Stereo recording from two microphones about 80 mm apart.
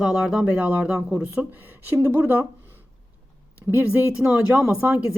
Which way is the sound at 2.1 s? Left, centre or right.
Right.